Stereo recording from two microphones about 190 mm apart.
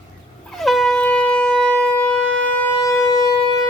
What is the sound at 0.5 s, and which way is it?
Shofar, centre (ahead or behind).